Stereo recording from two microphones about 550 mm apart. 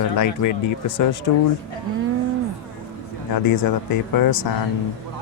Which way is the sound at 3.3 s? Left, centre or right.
Left.